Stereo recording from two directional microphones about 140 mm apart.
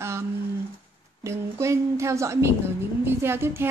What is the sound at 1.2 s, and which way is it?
A woman's voice, 20° right (ahead or behind).